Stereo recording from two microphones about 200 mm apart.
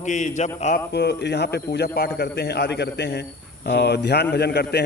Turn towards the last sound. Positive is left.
turn(degrees=55)  # may be behind; listen again after turning